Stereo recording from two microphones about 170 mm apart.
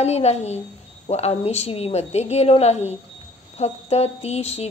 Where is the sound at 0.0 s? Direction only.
40° left (ahead or behind).